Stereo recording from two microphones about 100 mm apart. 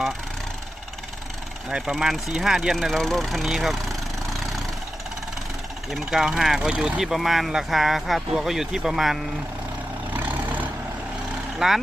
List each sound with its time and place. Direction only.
1.7 s speech: 5° right (ahead or behind)
5.9 s speech: 5° right (ahead or behind)
10.2 s vehicle: 15° right (ahead or behind)
11.6 s speech: 5° right (ahead or behind)